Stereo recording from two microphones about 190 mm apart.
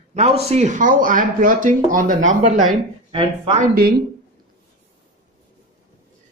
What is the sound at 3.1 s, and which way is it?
Speech, 30° right (ahead or behind).